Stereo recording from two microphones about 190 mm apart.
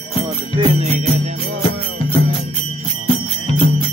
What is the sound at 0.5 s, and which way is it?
Music, 30° right (ahead or behind).